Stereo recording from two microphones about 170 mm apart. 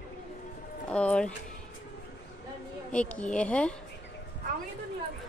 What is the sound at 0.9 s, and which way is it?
Speech, 5° left (ahead or behind).